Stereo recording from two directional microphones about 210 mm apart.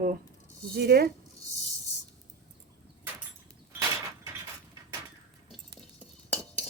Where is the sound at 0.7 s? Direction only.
50° right (ahead or behind).